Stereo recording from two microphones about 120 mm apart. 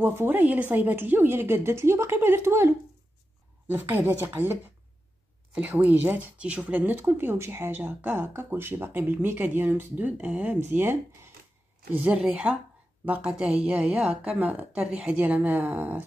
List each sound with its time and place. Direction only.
0.0 s a woman's voice: 20° right (ahead or behind)